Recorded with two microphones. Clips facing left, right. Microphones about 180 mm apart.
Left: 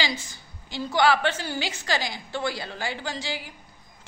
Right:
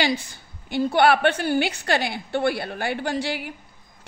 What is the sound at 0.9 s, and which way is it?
A woman's voice, 60° right (ahead or behind).